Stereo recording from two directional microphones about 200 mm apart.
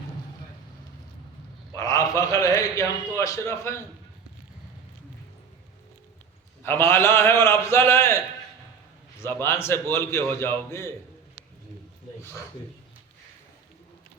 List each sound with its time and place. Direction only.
1.7 s a man's voice: 15° left (ahead or behind)
6.6 s a man's voice: 10° left (ahead or behind)
9.2 s a man's voice: 10° left (ahead or behind)